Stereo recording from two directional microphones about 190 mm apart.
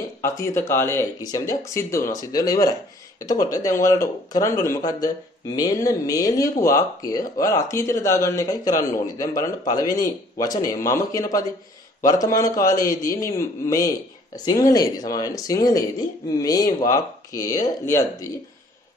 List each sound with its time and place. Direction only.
0.2 s speech: 15° left (ahead or behind)